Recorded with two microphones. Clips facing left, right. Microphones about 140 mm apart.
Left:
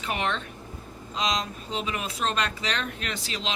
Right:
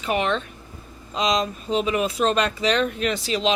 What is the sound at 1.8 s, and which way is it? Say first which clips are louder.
Speech: right 8 dB; 20° right (ahead or behind).